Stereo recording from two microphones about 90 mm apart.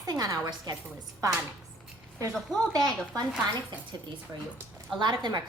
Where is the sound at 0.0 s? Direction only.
45° right (ahead or behind).